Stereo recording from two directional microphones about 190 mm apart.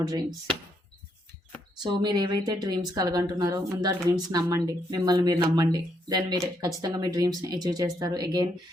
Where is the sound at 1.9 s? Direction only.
20° right (ahead or behind).